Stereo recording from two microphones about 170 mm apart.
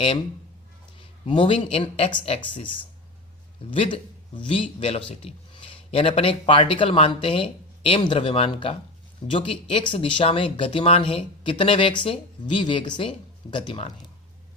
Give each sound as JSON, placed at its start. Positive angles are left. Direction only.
{"t": 0.9, "sound": "speech", "side_deg": 35}